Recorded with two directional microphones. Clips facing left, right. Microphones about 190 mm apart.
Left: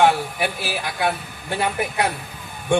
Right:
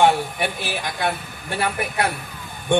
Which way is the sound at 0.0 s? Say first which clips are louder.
Even; 5° left (ahead or behind).